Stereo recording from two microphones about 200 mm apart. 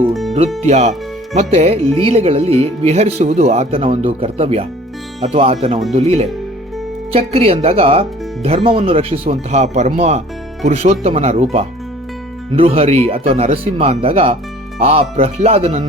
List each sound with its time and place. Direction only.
0.1 s music: centre (ahead or behind)
0.6 s speech: 35° right (ahead or behind)
12.5 s speech: 30° right (ahead or behind)